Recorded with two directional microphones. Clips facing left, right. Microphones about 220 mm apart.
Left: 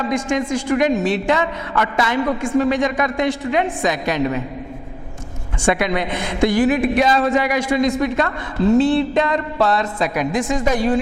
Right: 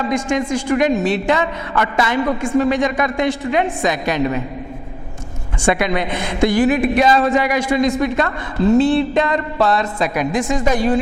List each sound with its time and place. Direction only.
0.0 s a man's voice: 20° right (ahead or behind)
5.6 s a woman's voice: 15° right (ahead or behind)